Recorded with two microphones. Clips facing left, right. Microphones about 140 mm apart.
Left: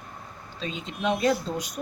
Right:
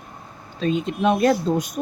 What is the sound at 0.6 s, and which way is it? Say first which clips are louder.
Speech: right 9 dB; 55° right (ahead or behind).